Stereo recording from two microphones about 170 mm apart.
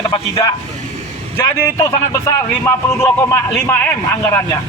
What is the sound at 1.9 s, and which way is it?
Speech, 15° left (ahead or behind).